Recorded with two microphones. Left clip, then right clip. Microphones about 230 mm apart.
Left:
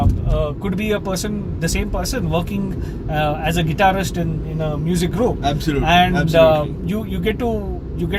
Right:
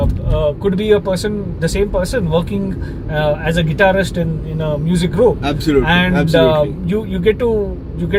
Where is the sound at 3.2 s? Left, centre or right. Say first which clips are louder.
Right 4 dB; centre.